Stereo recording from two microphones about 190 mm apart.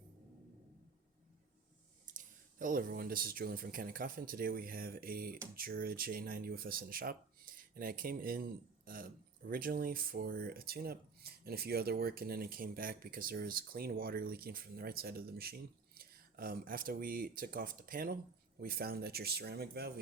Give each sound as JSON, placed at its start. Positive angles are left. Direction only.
{"t": 2.0, "sound": "speech", "side_deg": -45}